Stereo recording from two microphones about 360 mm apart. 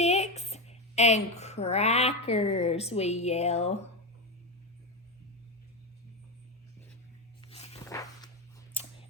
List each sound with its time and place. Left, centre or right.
0.0 s a woman's voice: centre
7.4 s walk: centre